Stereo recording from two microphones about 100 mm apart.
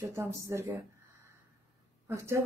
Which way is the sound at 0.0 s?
30° right (ahead or behind).